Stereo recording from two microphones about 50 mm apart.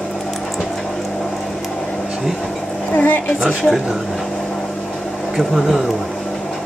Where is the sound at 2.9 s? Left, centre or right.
Left.